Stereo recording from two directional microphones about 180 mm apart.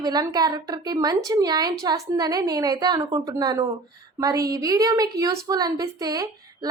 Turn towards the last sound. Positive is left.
turn(degrees=-20)  # may be behind; listen again after turning